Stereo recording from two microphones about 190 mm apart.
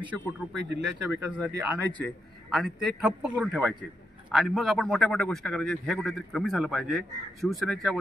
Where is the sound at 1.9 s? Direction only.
5° left (ahead or behind).